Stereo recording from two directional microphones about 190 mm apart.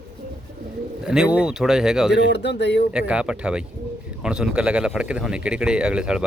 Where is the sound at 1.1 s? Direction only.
5° right (ahead or behind).